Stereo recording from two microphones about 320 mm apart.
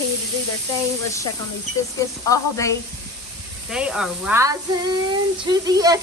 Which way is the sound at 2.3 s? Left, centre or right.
Centre.